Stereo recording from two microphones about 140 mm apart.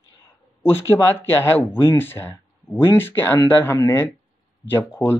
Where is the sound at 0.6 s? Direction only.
15° left (ahead or behind).